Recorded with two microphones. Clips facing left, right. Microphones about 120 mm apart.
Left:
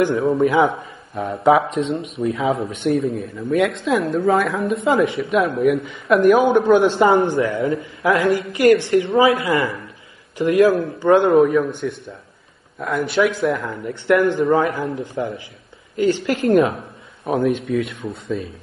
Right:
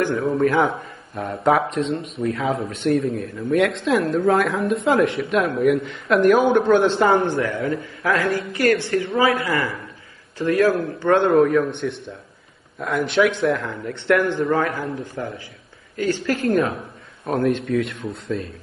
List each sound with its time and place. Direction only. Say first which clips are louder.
0.0 s a woman's voice: left 3 dB; 25° left (ahead or behind)
0.4 s a man's voice: even; 5° left (ahead or behind)
7.4 s a woman's voice: left 3 dB; 25° left (ahead or behind)
11.1 s a man's voice: left 3 dB; 5° left (ahead or behind); by 16.7 s 25° left (ahead or behind)
17.3 s speech: left 1 dB; centre (ahead or behind)